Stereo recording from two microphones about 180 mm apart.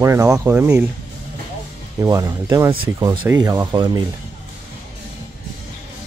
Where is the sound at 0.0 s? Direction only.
15° right (ahead or behind).